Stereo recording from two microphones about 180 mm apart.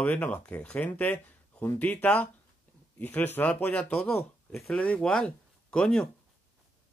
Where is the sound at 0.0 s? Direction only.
10° left (ahead or behind).